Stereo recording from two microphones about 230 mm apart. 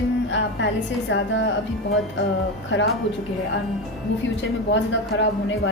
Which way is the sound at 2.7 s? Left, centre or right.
Left.